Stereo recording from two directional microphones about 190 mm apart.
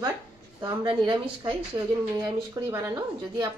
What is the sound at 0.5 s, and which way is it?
Speech, 25° right (ahead or behind).